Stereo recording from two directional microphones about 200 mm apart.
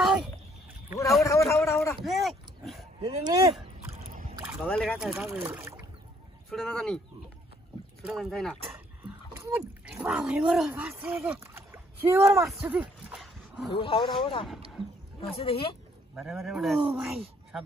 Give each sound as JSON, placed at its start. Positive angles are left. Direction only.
{"t": 0.0, "sound": "a sound", "side_deg": -5}
{"t": 1.2, "sound": "a man's voice", "side_deg": 15}
{"t": 2.0, "sound": "a sound", "side_deg": 0}
{"t": 3.0, "sound": "speech", "side_deg": -20}
{"t": 4.6, "sound": "speech", "side_deg": 0}
{"t": 6.5, "sound": "speech", "side_deg": 5}
{"t": 8.0, "sound": "speech", "side_deg": 0}
{"t": 12.4, "sound": "a sound", "side_deg": -5}
{"t": 13.7, "sound": "a woman's voice", "side_deg": 25}
{"t": 16.2, "sound": "speech", "side_deg": 0}